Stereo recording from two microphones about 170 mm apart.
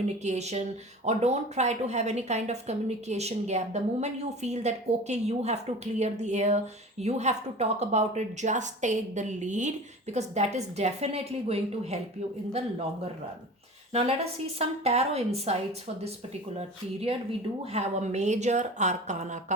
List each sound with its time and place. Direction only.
0.2 s a woman's voice: 40° right (ahead or behind)
13.9 s a woman's voice: 35° right (ahead or behind)
16.6 s a woman's voice: 35° right (ahead or behind)